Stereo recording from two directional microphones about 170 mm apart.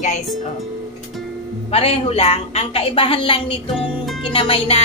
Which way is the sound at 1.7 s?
35° left (ahead or behind).